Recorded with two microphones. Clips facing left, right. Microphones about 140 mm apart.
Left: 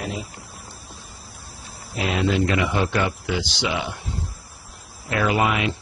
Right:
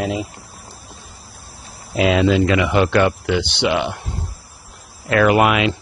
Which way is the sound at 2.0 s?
90° right.